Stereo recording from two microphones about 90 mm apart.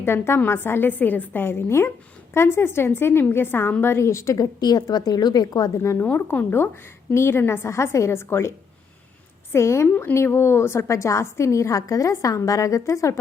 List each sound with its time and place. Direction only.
0.0 s a woman's voice: 25° left (ahead or behind)
4.6 s a woman's voice: 50° left (ahead or behind)
5.8 s a woman's voice: 30° left (ahead or behind)
6.1 s a woman's voice: 20° left (ahead or behind)
9.9 s a woman's voice: 20° left (ahead or behind); by 13.1 s 35° left (ahead or behind)